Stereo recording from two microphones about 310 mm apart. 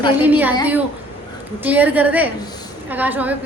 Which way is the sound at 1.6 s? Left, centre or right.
Centre.